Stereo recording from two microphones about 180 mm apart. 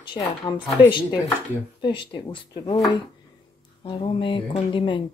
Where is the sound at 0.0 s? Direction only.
25° left (ahead or behind).